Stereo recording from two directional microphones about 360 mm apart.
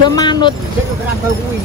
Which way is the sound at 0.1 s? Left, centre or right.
Centre.